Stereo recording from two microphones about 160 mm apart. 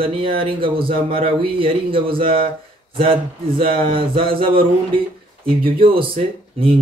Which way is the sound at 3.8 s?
35° right (ahead or behind).